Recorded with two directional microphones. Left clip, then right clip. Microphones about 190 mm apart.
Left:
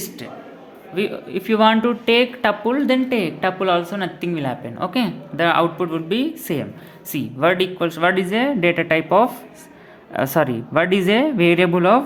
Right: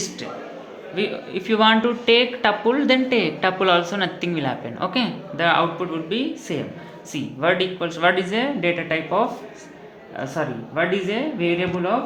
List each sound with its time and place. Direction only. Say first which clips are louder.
0.9 s speech: left 2 dB; 35° left (ahead or behind)